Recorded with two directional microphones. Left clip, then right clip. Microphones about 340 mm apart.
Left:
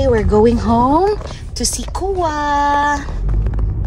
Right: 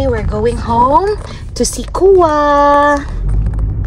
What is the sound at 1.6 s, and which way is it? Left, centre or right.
Speech, centre.